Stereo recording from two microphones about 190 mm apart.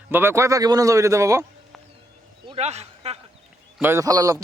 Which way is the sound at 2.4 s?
30° right (ahead or behind).